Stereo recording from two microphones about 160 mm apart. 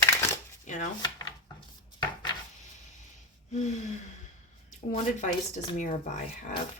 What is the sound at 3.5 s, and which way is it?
Speech, 45° left (ahead or behind).